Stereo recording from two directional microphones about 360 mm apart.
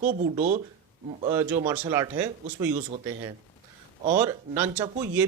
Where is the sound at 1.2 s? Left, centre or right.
Centre.